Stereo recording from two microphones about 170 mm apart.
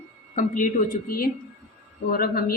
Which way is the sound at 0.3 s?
50° left (ahead or behind).